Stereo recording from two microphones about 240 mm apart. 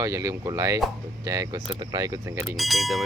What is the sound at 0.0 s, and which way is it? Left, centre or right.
Speech, centre.